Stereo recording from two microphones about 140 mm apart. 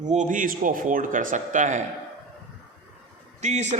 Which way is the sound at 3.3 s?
55° right (ahead or behind).